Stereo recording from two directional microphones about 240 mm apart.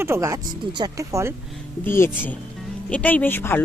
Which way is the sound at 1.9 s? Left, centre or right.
Centre.